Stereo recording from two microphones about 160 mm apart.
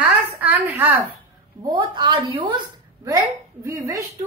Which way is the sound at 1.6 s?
25° right (ahead or behind).